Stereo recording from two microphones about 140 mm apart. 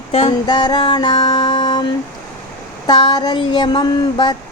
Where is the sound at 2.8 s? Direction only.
30° left (ahead or behind).